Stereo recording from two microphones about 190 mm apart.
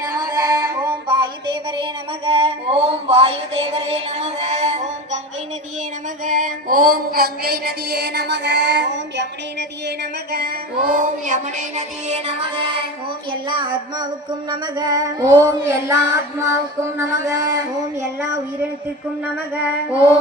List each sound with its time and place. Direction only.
0.2 s music: 20° right (ahead or behind); by 5.2 s 35° right (ahead or behind)
6.2 s music: 45° right (ahead or behind)
13.3 s child singing: 25° right (ahead or behind)
14.5 s music: 20° right (ahead or behind)